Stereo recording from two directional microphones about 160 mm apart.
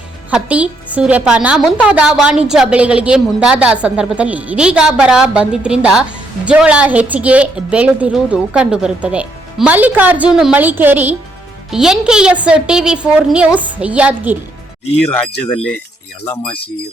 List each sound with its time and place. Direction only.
0.3 s a woman's voice: 5° right (ahead or behind)